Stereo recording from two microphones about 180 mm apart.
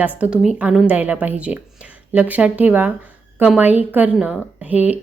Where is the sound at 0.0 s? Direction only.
10° right (ahead or behind).